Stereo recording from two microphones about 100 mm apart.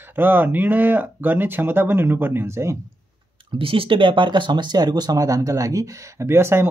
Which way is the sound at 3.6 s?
65° right (ahead or behind).